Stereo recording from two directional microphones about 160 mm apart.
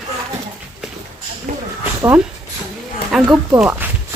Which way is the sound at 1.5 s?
55° right (ahead or behind).